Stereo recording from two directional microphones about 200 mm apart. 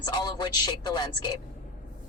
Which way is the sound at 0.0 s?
20° left (ahead or behind).